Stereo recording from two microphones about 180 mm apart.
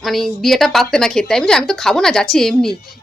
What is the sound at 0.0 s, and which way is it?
A woman's voice, centre (ahead or behind).